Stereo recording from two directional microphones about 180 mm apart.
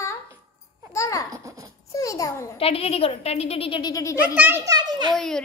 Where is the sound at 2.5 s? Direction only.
35° left (ahead or behind).